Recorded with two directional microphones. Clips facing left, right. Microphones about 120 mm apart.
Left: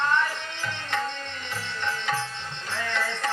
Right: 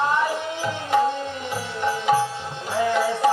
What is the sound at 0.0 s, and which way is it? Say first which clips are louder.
Music: right 4 dB; 10° right (ahead or behind).